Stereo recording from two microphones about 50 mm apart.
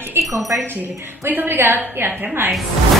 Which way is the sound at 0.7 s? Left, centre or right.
Right.